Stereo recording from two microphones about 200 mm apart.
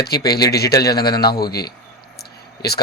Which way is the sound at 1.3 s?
50° left (ahead or behind).